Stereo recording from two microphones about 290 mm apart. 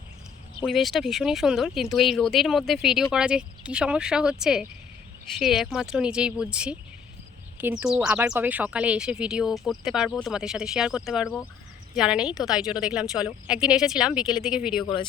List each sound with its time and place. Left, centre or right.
0.6 s speech: centre
14.8 s speech: centre